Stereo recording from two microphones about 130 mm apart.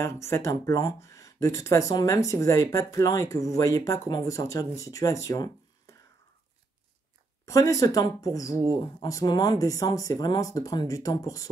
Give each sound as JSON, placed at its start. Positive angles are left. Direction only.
{"t": 0.0, "sound": "speech", "side_deg": 20}
{"t": 7.4, "sound": "speech", "side_deg": 25}